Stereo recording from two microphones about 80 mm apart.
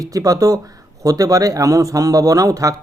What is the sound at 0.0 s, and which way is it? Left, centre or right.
Speech, right.